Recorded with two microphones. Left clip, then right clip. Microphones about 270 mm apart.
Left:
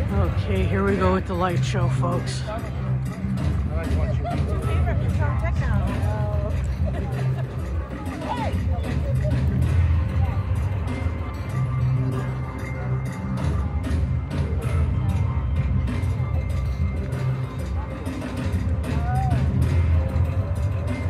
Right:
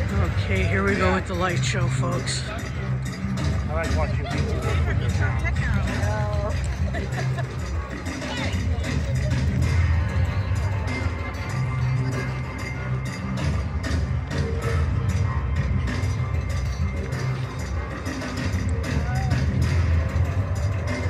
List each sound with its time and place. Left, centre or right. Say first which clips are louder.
0.5 s speech: right 1 dB; centre